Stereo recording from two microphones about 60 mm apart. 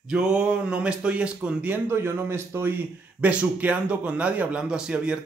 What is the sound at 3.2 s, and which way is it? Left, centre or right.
Speech, right.